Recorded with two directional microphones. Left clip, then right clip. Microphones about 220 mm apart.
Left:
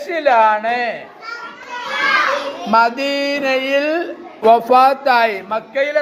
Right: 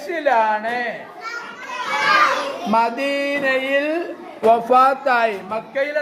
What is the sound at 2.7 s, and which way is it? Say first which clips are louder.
Speech: left 5 dB; 20° left (ahead or behind).